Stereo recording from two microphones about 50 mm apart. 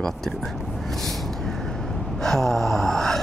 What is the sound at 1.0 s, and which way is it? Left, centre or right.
Vehicle, centre.